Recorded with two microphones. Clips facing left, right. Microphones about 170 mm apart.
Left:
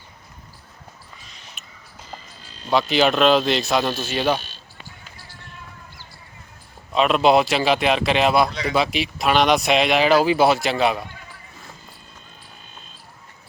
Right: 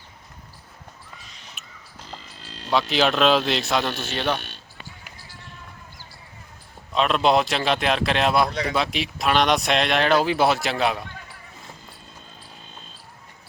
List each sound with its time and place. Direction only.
2.4 s a sound: 80° right
2.9 s speech: centre (ahead or behind)
4.4 s music: 60° right (ahead or behind)
6.9 s speech: 5° left (ahead or behind)